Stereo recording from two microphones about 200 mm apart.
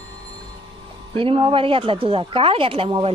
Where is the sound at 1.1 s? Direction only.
25° right (ahead or behind).